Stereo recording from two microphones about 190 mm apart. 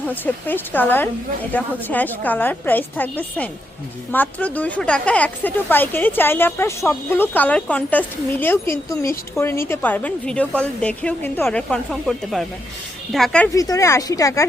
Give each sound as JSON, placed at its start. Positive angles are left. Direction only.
{"t": 0.1, "sound": "speech", "side_deg": 10}
{"t": 13.5, "sound": "speech", "side_deg": 15}